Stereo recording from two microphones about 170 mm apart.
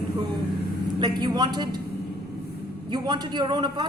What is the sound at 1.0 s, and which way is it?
Speech, 25° right (ahead or behind).